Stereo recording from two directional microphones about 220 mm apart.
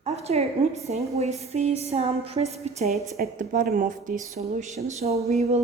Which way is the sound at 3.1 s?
40° right (ahead or behind).